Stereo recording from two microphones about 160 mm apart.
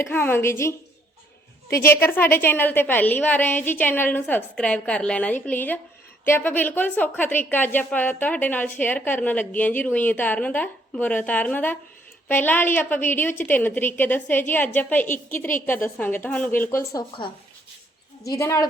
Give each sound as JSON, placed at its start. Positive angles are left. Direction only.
{"t": 0.0, "sound": "a woman's voice", "side_deg": 10}
{"t": 18.3, "sound": "a woman's voice", "side_deg": 20}